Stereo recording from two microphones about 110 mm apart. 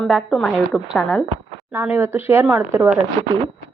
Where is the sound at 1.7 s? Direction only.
20° right (ahead or behind).